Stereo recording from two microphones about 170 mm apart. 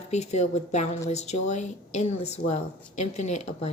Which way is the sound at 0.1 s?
40° left (ahead or behind).